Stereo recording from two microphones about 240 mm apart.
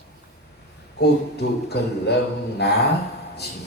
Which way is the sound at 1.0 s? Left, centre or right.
Left.